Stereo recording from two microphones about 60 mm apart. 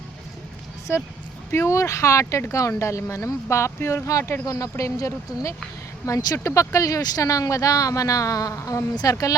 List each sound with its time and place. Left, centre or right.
1.5 s speech: left
4.4 s speech: left